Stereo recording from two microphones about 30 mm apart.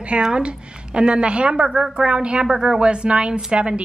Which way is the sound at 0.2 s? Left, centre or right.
Right.